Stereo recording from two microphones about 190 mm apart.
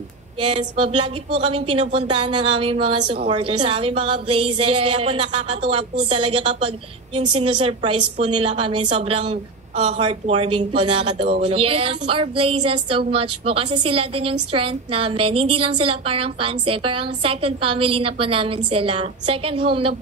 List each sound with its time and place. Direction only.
0.4 s a woman's voice: 25° right (ahead or behind)